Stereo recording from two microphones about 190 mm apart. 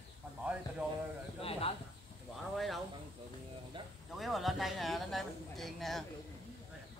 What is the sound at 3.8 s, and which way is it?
Speech, 25° right (ahead or behind).